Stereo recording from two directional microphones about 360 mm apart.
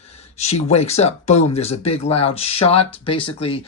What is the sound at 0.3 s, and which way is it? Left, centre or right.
Speech, centre.